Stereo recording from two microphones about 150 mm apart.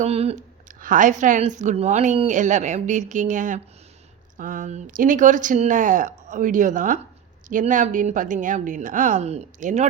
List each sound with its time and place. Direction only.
0.0 s speech: 45° right (ahead or behind)
0.8 s a woman's voice: 60° right (ahead or behind)